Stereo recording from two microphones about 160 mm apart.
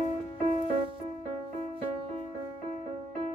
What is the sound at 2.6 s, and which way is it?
Music, 40° right (ahead or behind).